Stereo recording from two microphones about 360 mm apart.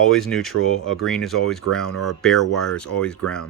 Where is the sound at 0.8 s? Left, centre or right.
Left.